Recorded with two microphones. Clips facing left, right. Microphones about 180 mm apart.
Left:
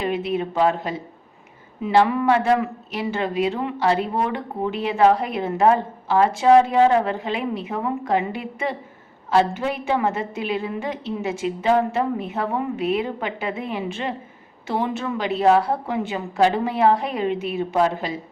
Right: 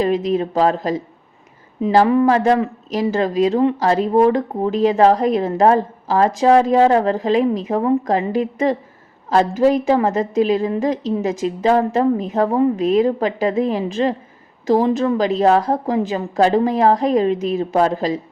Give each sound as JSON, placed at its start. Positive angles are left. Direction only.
{"t": 0.0, "sound": "speech", "side_deg": -40}